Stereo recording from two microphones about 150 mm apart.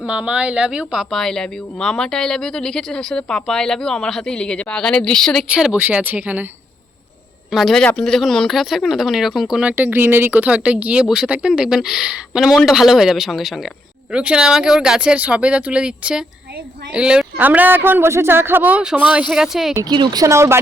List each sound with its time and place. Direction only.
0.0 s speech: 10° right (ahead or behind)
7.5 s speech: centre (ahead or behind)
19.7 s speech: 25° right (ahead or behind)